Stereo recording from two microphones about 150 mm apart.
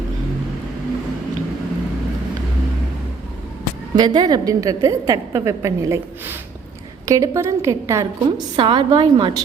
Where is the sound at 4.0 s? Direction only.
30° right (ahead or behind).